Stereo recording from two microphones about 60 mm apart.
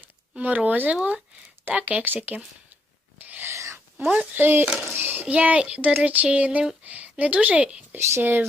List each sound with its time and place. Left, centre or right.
0.3 s speech: right
3.2 s filing: right
3.5 s a sound: right
4.0 s speech: centre
4.4 s speech: right
7.9 s speech: right